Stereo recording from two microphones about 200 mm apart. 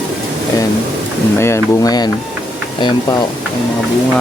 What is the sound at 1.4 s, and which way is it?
Speech, 15° left (ahead or behind).